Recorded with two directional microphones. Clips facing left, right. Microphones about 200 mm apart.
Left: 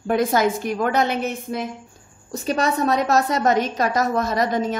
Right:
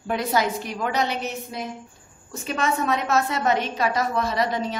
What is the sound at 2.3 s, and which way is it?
A woman's voice, 35° left (ahead or behind).